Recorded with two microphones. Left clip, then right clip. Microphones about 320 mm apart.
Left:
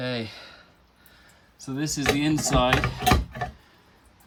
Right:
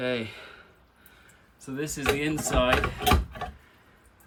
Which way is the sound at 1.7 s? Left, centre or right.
Left.